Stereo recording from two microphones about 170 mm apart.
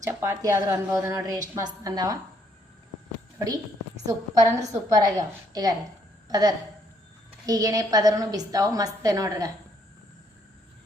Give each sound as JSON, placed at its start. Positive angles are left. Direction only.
{"t": 0.0, "sound": "a woman's voice", "side_deg": -15}
{"t": 3.3, "sound": "a woman's voice", "side_deg": -20}